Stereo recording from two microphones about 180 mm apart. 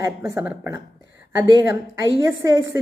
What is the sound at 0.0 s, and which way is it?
A woman's voice, 15° right (ahead or behind).